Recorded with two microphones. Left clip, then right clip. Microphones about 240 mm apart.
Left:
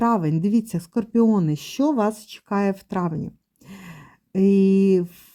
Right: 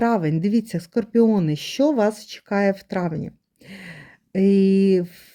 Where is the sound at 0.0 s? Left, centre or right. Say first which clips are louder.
Right 1 dB; centre.